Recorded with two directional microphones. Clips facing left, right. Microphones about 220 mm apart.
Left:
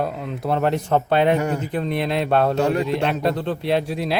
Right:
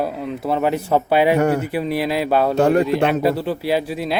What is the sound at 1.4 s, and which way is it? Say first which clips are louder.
Speech: right 6 dB; 60° right (ahead or behind).